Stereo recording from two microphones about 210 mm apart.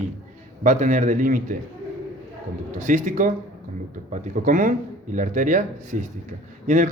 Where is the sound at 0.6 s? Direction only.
35° right (ahead or behind).